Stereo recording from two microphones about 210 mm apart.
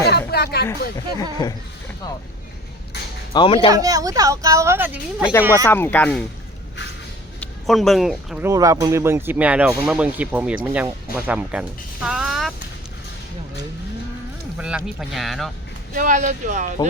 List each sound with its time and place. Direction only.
0.0 s a sound: 50° left (ahead or behind)
0.9 s speech: 20° left (ahead or behind)
3.3 s speech: 25° left (ahead or behind)
3.7 s speech: 15° right (ahead or behind)
5.6 s speech: 10° left (ahead or behind)
7.3 s speech: centre (ahead or behind)
8.4 s speech: 15° right (ahead or behind)
12.0 s music: 5° right (ahead or behind)
14.6 s speech: 5° right (ahead or behind)
16.0 s speech: 35° right (ahead or behind)